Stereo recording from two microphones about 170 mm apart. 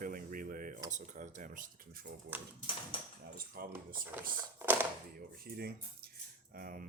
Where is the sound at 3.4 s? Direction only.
60° right (ahead or behind).